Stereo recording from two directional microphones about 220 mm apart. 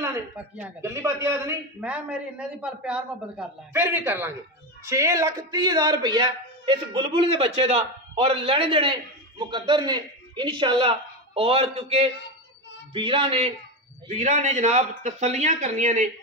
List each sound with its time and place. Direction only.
0.0 s a man's voice: 10° right (ahead or behind); by 16.1 s 35° right (ahead or behind)